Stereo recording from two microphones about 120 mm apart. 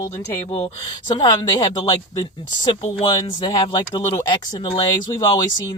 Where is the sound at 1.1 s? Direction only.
35° left (ahead or behind).